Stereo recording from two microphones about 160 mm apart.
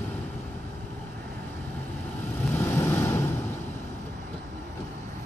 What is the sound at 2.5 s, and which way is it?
Vehicle, 15° left (ahead or behind).